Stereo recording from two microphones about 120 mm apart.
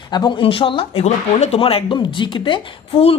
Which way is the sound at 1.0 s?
60° left (ahead or behind).